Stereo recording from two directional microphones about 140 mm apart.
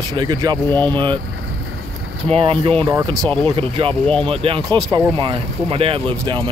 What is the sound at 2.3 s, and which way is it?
Speech, 40° right (ahead or behind).